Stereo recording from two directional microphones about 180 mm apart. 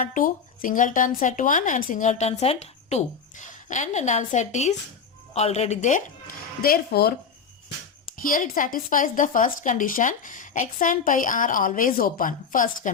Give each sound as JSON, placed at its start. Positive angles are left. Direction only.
{"t": 0.0, "sound": "speech", "side_deg": 50}
{"t": 8.1, "sound": "speech", "side_deg": 50}